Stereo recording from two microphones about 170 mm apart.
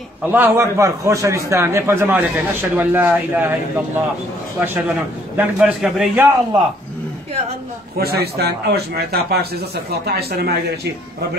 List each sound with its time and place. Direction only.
0.2 s a man's voice: 10° right (ahead or behind)
4.6 s a man's voice: 10° right (ahead or behind)
8.0 s a man's voice: 70° right (ahead or behind)